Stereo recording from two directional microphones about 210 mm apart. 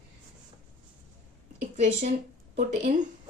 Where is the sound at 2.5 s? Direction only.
35° right (ahead or behind).